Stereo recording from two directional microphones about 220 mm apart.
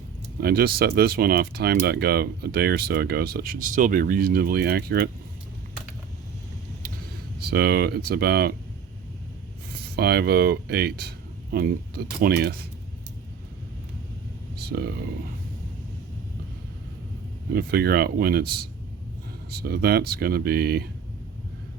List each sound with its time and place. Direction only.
0.3 s speech: 45° right (ahead or behind)
7.3 s speech: 45° right (ahead or behind)
9.7 s speech: 45° right (ahead or behind)
14.5 s speech: 45° right (ahead or behind)
17.5 s speech: 45° right (ahead or behind)